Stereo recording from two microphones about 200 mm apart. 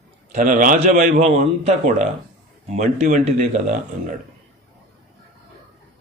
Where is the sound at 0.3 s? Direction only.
40° right (ahead or behind).